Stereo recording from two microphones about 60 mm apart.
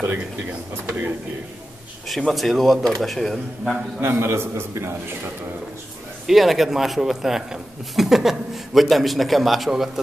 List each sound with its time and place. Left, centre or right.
0.0 s speech: right
0.5 s speech: right
2.0 s a man's voice: centre
4.0 s a man's voice: right
6.2 s a man's voice: centre